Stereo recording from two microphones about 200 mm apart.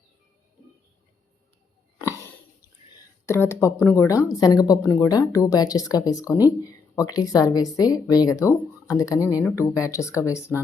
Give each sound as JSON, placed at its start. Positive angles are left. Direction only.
{"t": 3.2, "sound": "speech", "side_deg": 10}